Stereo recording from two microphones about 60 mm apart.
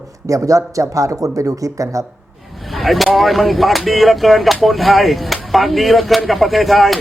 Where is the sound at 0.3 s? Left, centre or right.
Right.